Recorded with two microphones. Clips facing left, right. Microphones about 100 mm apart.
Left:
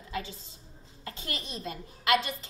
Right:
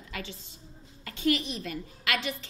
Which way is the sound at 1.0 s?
30° left (ahead or behind).